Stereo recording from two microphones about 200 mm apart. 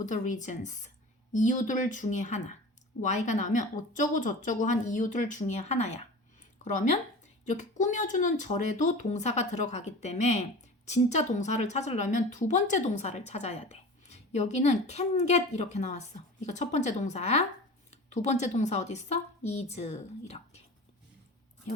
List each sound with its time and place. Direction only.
0.0 s a woman's voice: 40° left (ahead or behind)